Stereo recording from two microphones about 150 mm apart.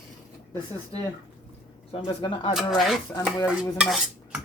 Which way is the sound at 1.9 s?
35° left (ahead or behind).